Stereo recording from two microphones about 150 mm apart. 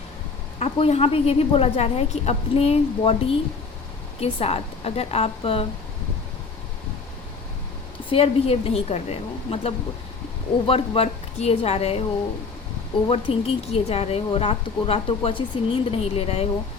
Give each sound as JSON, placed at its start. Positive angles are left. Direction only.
{"t": 0.6, "sound": "a woman's voice", "side_deg": 40}
{"t": 8.1, "sound": "a woman's voice", "side_deg": 40}
{"t": 13.1, "sound": "a woman's voice", "side_deg": 40}